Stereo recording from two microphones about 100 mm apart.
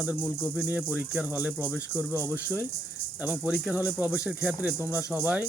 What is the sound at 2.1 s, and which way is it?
Speech, 25° right (ahead or behind).